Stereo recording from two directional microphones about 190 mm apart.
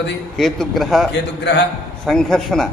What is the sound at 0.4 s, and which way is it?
Speech, centre (ahead or behind).